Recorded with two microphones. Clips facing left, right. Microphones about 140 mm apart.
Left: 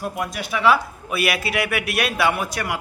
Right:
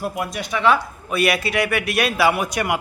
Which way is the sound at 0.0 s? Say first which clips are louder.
Right 1 dB; centre (ahead or behind).